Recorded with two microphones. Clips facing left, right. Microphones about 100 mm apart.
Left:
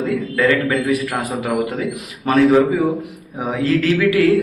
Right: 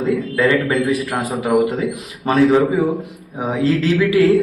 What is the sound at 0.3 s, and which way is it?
Speech, 30° right (ahead or behind).